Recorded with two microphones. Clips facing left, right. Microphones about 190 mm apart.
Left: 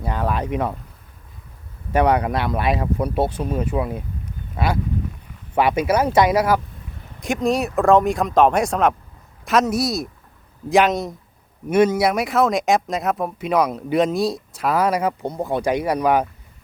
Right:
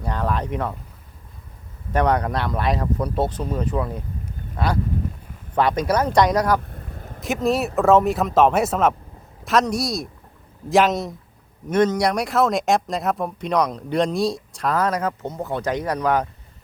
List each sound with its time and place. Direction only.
0.0 s speech: 10° left (ahead or behind)
1.9 s speech: 10° left (ahead or behind)
6.7 s a sound: 55° right (ahead or behind)
7.2 s speech: centre (ahead or behind)